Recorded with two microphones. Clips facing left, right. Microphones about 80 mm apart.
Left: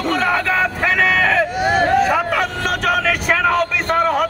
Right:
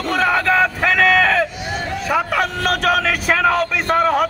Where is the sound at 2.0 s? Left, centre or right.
Centre.